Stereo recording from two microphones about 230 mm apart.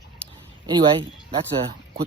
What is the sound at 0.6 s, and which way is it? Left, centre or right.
Speech, centre.